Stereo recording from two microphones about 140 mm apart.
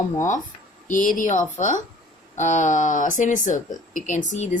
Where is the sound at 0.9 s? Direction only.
70° left (ahead or behind).